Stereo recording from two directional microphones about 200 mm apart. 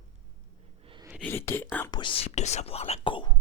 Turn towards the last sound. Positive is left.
turn(degrees=25)  # may be behind; listen again after turning